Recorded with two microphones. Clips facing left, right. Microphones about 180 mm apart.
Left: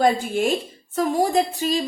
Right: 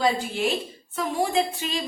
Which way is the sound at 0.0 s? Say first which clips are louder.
Left 4 dB; 50° left (ahead or behind).